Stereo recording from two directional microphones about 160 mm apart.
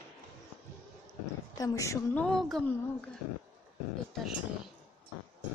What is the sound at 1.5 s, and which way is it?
Speech, 25° left (ahead or behind).